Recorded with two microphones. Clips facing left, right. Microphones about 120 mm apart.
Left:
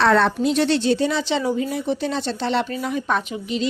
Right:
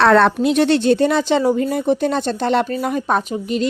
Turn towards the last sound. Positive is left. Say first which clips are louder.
# right 5 dB
turn(degrees=-45)  # may be behind; listen again after turning